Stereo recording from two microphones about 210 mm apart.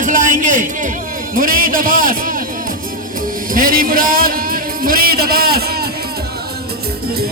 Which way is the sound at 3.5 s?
40° right (ahead or behind).